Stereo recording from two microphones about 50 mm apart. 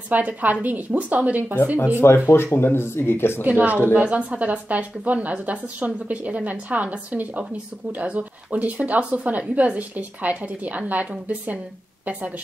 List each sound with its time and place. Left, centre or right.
0.1 s a woman's voice: right
2.0 s speech: left
3.4 s a woman's voice: right